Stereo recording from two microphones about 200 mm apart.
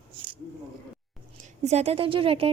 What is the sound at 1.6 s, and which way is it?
Speech, 30° right (ahead or behind).